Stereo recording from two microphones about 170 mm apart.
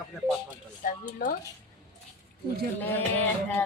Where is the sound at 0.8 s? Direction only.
55° left (ahead or behind).